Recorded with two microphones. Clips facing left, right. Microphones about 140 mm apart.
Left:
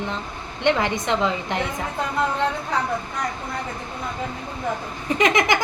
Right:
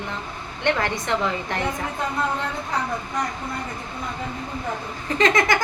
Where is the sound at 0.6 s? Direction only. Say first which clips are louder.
Left 3 dB; 15° left (ahead or behind).